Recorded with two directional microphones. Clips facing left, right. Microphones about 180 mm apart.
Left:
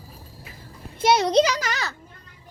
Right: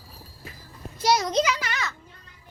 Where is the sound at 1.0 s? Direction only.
25° left (ahead or behind).